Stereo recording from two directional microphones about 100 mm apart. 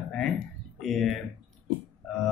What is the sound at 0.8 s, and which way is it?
Speech, 5° left (ahead or behind).